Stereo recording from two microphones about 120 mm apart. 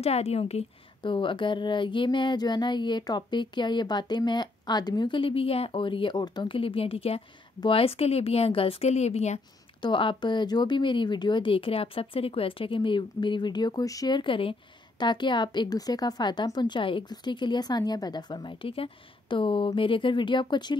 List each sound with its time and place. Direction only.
0.0 s a woman's voice: 60° left (ahead or behind)
1.0 s a sound: 45° left (ahead or behind); by 9.4 s 65° left (ahead or behind)
9.8 s speech: 40° left (ahead or behind)